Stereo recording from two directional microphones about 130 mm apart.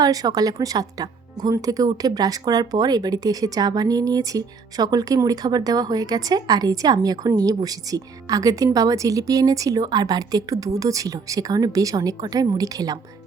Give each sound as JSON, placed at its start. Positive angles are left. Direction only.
{"t": 0.0, "sound": "speech", "side_deg": -30}